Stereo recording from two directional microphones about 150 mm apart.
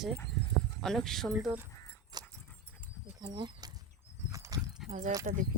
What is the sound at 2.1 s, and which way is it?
Dog, 25° right (ahead or behind).